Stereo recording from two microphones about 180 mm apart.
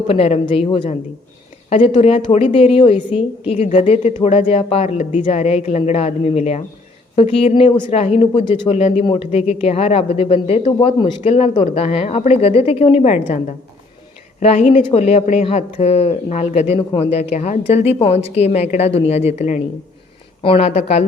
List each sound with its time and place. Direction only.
0.1 s a woman's voice: 35° left (ahead or behind)